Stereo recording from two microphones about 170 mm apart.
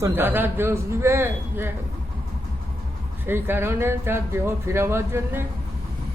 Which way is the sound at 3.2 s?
15° right (ahead or behind).